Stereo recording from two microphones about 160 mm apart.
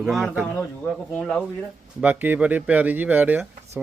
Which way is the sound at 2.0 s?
10° right (ahead or behind).